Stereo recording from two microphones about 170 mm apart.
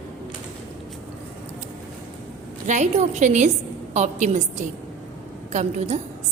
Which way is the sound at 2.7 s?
45° right (ahead or behind).